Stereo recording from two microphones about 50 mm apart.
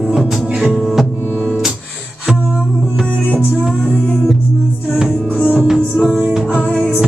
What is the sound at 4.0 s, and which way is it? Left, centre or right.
Music, centre.